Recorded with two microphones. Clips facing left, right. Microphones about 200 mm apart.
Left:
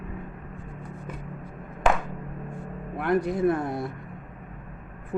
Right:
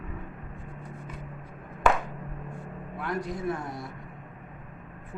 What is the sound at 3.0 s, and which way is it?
Speech, 60° left (ahead or behind).